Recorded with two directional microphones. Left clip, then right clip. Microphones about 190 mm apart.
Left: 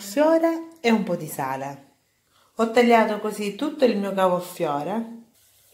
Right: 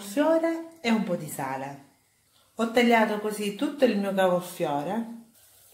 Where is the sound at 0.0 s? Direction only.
25° left (ahead or behind).